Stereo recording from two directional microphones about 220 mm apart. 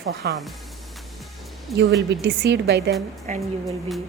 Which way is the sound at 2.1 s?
50° right (ahead or behind).